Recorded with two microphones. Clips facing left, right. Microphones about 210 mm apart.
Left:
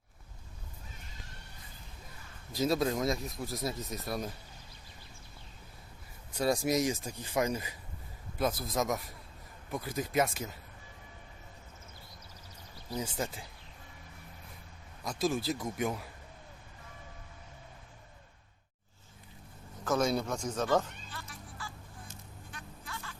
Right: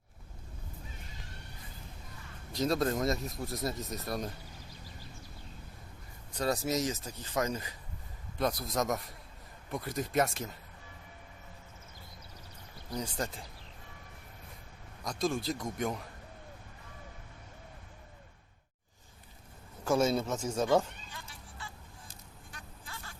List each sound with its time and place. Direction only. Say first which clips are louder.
2.5 s speech: even; 5° left (ahead or behind)
6.3 s speech: left 2 dB; 10° left (ahead or behind)
13.0 s speech: left 1 dB; 5° left (ahead or behind)
15.0 s speech: left 1 dB; 5° left (ahead or behind)
19.8 s speech: right 2 dB; 10° right (ahead or behind)
21.2 s music: left 2 dB; 30° right (ahead or behind)